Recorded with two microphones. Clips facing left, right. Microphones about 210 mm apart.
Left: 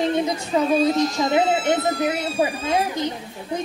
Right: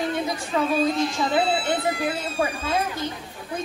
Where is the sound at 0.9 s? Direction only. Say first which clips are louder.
Left 3 dB; 40° left (ahead or behind).